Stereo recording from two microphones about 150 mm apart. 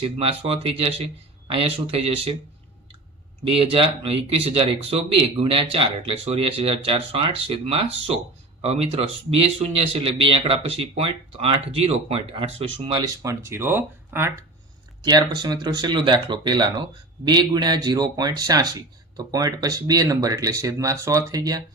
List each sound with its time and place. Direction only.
0.0 s speech: 40° right (ahead or behind)
3.5 s speech: 35° right (ahead or behind)
13.0 s speech: 20° right (ahead or behind)
15.0 s speech: 25° right (ahead or behind)